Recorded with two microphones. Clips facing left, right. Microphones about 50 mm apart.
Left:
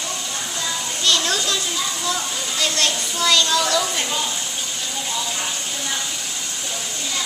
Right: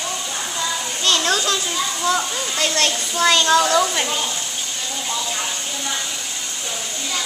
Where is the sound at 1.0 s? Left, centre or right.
Right.